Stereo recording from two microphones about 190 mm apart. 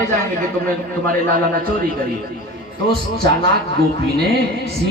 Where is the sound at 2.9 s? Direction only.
55° right (ahead or behind).